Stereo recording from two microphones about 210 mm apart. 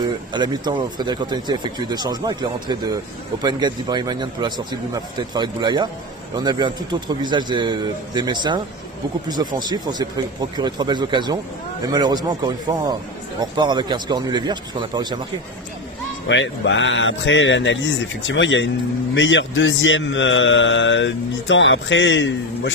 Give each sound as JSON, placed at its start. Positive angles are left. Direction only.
{"t": 0.3, "sound": "speech", "side_deg": -20}
{"t": 16.3, "sound": "a man's voice", "side_deg": 60}